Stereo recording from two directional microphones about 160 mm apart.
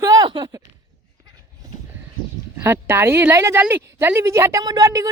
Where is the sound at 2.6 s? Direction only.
15° right (ahead or behind).